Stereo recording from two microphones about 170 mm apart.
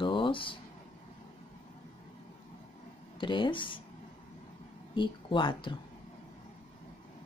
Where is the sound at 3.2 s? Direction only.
30° left (ahead or behind).